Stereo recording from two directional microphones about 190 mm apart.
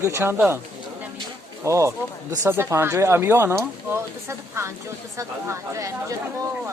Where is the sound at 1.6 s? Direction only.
15° right (ahead or behind).